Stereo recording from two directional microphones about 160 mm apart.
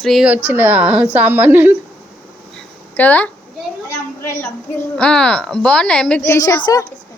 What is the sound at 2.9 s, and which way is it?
Speech, 10° left (ahead or behind).